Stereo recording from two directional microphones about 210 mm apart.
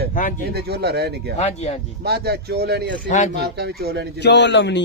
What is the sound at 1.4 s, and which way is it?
Speech, 30° left (ahead or behind).